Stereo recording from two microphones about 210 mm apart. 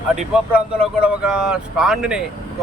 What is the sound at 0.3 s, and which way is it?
Speech, 5° right (ahead or behind).